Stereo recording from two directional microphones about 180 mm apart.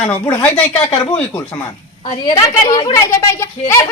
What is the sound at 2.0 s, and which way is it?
A woman's voice, 25° left (ahead or behind).